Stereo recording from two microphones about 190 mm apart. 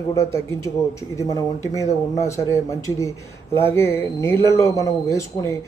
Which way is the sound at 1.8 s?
15° left (ahead or behind).